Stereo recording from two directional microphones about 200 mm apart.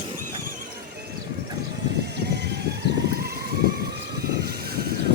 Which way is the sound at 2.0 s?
55° right (ahead or behind).